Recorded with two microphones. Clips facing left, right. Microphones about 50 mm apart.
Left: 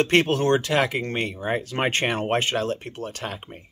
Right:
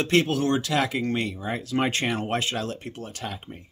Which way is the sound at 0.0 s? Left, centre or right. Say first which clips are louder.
Left 2 dB; left.